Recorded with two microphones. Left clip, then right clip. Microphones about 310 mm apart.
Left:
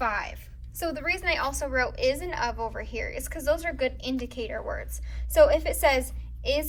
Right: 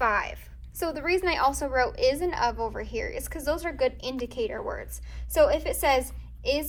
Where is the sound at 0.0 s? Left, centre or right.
Right.